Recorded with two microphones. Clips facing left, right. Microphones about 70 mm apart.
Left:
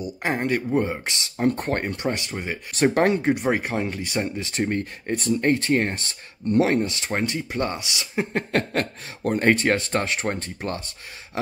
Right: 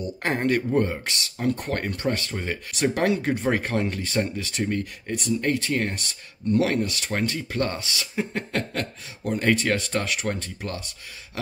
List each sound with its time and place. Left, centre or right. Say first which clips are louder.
0.0 s speech: even; centre
1.5 s speech: left 1 dB; left
1.8 s speech: even; left
2.7 s speech: left 4 dB; left
3.2 s speech: left 2 dB; centre
4.4 s speech: left 2 dB; left; by 8.1 s centre
8.2 s speech: left 4 dB; left